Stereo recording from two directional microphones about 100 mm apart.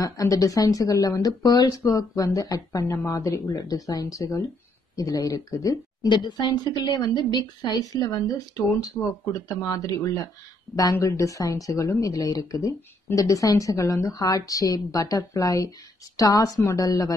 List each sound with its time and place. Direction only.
0.0 s a woman's voice: 35° left (ahead or behind)
6.0 s a woman's voice: 45° left (ahead or behind)